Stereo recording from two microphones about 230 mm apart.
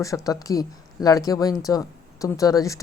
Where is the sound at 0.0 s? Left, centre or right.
Centre.